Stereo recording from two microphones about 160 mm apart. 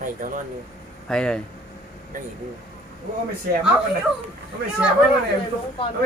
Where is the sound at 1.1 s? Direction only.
5° left (ahead or behind).